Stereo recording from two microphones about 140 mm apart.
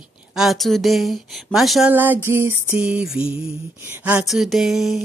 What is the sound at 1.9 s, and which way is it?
Speech, 15° right (ahead or behind).